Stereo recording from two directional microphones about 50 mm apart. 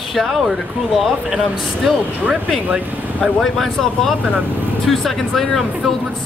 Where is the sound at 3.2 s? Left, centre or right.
Centre.